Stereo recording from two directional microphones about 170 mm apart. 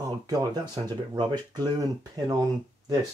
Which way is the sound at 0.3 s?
25° right (ahead or behind).